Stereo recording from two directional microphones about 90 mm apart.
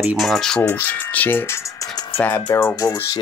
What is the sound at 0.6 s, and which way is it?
Speech, 20° left (ahead or behind).